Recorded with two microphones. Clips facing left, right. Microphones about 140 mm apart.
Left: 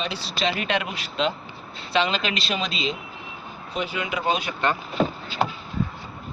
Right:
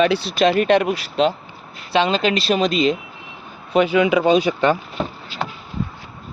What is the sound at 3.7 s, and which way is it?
Speech, 65° right (ahead or behind).